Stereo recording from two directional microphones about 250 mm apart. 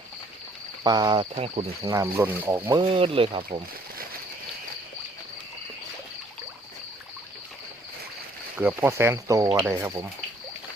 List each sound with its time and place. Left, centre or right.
0.9 s speech: centre
2.8 s speech: right
8.5 s speech: centre